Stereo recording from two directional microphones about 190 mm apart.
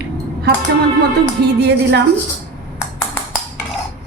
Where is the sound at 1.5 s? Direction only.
60° right (ahead or behind).